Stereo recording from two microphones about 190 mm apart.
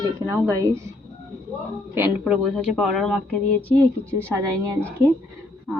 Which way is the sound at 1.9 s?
5° right (ahead or behind).